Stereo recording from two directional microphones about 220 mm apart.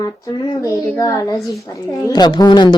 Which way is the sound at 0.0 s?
15° left (ahead or behind).